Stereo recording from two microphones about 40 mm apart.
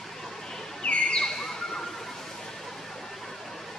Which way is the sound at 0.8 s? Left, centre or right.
Left.